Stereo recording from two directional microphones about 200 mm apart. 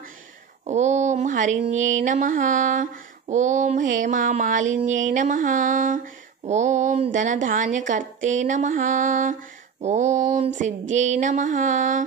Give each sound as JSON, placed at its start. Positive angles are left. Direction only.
{"t": 0.7, "sound": "mantra", "side_deg": -35}
{"t": 4.0, "sound": "music", "side_deg": -40}